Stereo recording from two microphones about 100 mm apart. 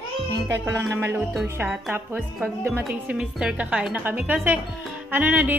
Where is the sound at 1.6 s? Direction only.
15° right (ahead or behind).